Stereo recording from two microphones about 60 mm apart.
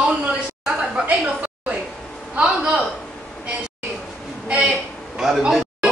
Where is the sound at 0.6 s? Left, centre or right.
Centre.